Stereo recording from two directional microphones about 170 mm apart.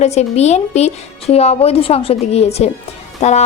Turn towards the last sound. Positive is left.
turn(degrees=40)  # may be behind; listen again after turning